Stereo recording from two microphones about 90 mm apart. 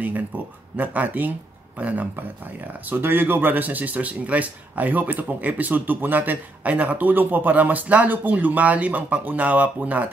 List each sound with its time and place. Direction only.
0.3 s speech: 20° right (ahead or behind)